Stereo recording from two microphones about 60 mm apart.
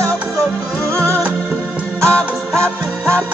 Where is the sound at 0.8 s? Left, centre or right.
Right.